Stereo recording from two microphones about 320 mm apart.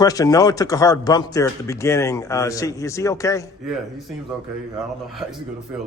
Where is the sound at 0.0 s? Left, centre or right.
Centre.